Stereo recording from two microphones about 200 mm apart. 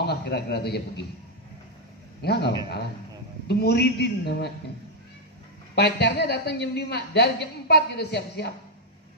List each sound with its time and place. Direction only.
0.0 s a man's voice: 55° left (ahead or behind)
2.2 s a woman's voice: 55° left (ahead or behind)
5.8 s a woman's voice: 55° left (ahead or behind)